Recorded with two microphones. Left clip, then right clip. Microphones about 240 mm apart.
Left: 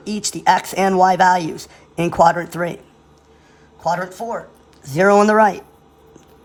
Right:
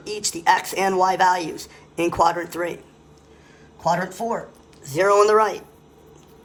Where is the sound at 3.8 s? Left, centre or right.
Centre.